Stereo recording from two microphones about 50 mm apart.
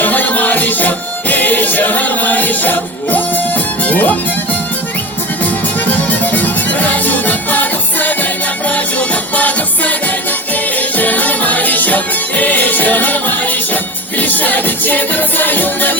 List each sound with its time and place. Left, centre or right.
0.0 s music: left
5.4 s music: left